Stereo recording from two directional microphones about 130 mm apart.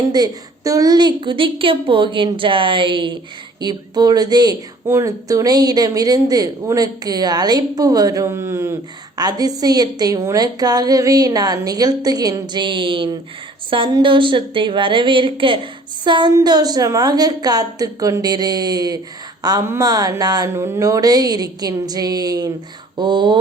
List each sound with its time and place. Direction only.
0.1 s a woman's voice: 30° right (ahead or behind)